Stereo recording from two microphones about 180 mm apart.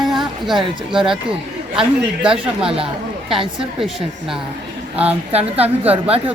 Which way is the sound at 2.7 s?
30° right (ahead or behind).